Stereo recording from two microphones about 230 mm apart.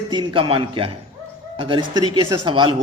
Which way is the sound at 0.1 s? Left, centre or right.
Right.